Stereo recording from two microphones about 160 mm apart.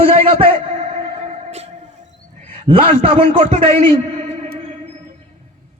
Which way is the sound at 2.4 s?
35° right (ahead or behind).